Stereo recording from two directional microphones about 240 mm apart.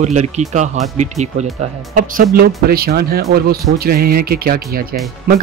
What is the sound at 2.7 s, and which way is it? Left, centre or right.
Speech, right.